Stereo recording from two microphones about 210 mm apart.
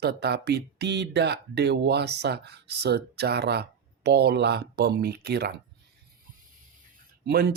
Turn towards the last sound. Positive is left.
turn(degrees=-50)  # may be behind; listen again after turning